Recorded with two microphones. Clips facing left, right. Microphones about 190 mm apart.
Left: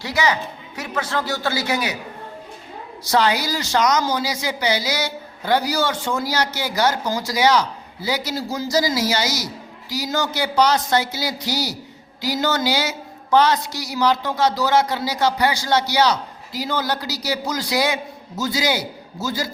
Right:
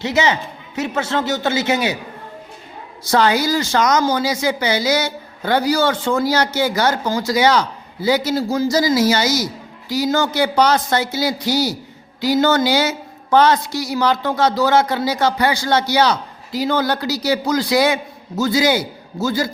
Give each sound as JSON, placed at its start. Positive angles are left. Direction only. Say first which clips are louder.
{"t": 0.0, "sound": "a man's voice", "louder": "right 4 dB", "side_deg": -25}
{"t": 3.0, "sound": "a woman's voice", "louder": "right 3 dB", "side_deg": -50}